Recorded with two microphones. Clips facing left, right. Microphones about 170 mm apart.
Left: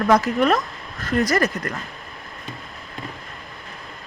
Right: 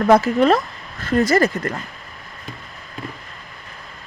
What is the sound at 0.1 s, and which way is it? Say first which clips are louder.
Speech: right 4 dB; 30° right (ahead or behind).